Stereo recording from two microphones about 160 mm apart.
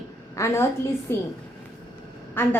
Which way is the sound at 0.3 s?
15° left (ahead or behind).